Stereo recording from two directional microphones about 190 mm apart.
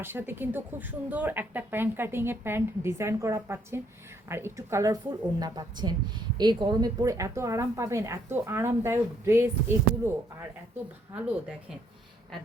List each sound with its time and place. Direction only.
0.0 s a woman's voice: 10° right (ahead or behind)